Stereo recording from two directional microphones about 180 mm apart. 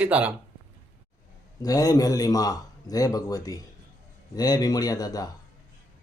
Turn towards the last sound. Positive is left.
turn(degrees=20)  # may be behind; listen again after turning